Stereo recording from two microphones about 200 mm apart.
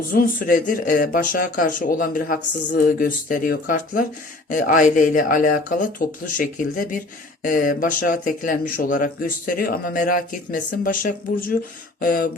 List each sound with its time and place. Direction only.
0.1 s speech: 45° left (ahead or behind)